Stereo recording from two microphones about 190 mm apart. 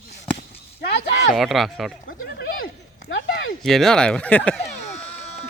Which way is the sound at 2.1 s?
55° left (ahead or behind).